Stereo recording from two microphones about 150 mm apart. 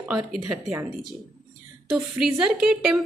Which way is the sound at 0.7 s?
15° right (ahead or behind).